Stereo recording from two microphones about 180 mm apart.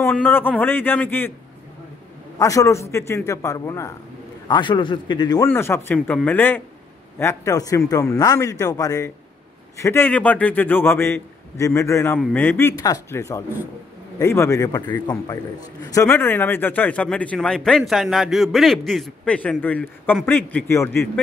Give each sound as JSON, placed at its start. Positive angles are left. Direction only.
{"t": 0.1, "sound": "a man's voice", "side_deg": 10}
{"t": 2.3, "sound": "a man's voice", "side_deg": 20}